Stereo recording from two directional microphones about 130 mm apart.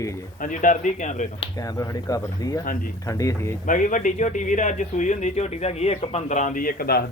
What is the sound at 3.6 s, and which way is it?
A man's voice, 75° left (ahead or behind).